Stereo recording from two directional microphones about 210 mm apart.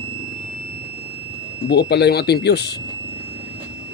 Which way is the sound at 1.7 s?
50° left (ahead or behind).